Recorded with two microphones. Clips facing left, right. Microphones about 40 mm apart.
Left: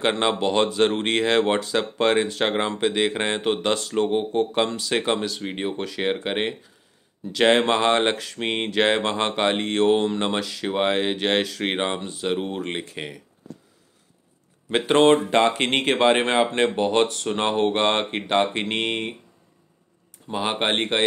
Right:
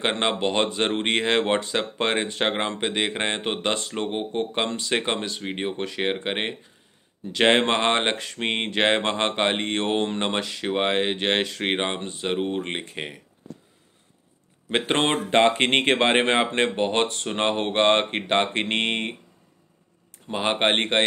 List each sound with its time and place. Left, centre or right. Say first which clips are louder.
0.0 s speech: left 2 dB; right
4.6 s speech: left 1 dB; right
4.9 s speech: left 3 dB; right
14.7 s speech: left 6 dB; right
20.2 s speech: right 1 dB; right